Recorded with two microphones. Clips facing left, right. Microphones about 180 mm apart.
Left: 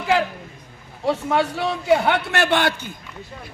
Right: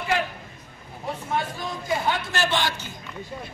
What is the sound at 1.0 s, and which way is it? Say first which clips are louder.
A man's voice: left 8 dB; 80° left.